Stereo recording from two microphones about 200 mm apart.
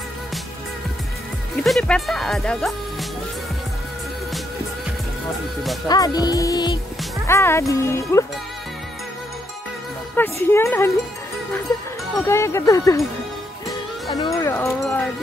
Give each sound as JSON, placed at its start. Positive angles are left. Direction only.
{"t": 1.6, "sound": "speech", "side_deg": 5}
{"t": 5.9, "sound": "speech", "side_deg": 20}
{"t": 10.1, "sound": "speech", "side_deg": 10}
{"t": 12.3, "sound": "speech", "side_deg": 15}
{"t": 14.0, "sound": "speech", "side_deg": 20}